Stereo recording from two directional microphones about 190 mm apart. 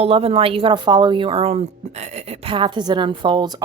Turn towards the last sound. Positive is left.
turn(degrees=-25)  # may be behind; listen again after turning